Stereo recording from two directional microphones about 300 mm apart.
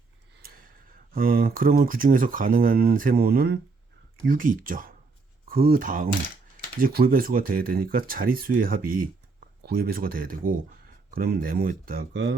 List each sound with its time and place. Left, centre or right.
1.1 s speech: right